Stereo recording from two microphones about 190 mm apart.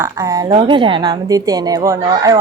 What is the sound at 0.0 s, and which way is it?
A woman's voice, 15° right (ahead or behind).